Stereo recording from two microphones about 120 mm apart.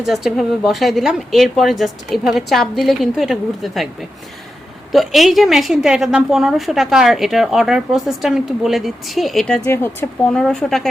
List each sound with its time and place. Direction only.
0.0 s a woman's voice: centre (ahead or behind)
4.9 s a woman's voice: centre (ahead or behind)
9.6 s speech: 20° left (ahead or behind)
10.3 s a woman's voice: 5° left (ahead or behind)